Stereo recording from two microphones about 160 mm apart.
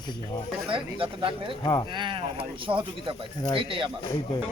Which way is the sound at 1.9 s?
30° right (ahead or behind).